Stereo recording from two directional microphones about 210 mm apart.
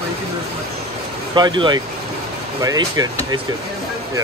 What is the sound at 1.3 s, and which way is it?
Speech, 20° right (ahead or behind).